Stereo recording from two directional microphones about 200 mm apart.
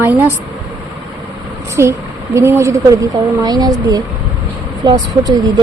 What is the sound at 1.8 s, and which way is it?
Speech, 15° right (ahead or behind).